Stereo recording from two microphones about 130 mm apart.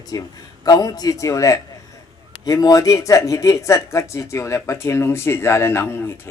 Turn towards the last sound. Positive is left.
turn(degrees=20)  # may be behind; listen again after turning